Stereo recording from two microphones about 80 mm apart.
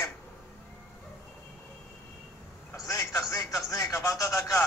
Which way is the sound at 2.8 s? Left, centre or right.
Left.